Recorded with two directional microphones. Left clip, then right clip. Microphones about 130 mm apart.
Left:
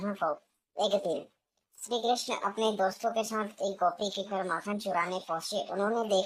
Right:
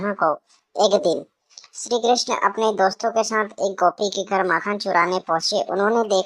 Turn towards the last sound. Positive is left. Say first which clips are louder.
# right 10 dB
turn(degrees=-30)  # may be behind; listen again after turning